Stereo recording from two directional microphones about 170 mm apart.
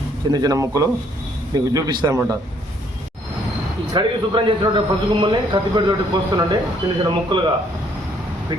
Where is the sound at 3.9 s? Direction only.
30° right (ahead or behind).